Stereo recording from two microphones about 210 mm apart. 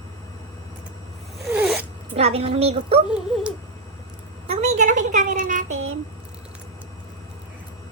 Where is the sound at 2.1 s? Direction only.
30° right (ahead or behind).